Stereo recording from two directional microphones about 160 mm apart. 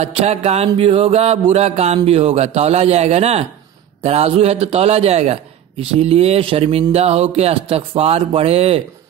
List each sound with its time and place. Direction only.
0.0 s a man's voice: 40° right (ahead or behind)